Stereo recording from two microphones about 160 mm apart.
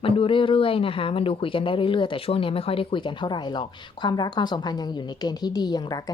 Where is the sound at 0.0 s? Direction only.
35° left (ahead or behind).